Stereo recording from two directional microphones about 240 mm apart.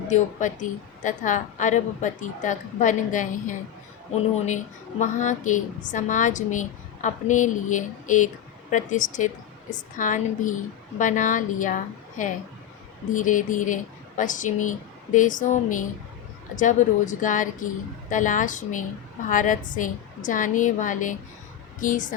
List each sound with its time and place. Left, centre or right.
0.1 s a woman's voice: left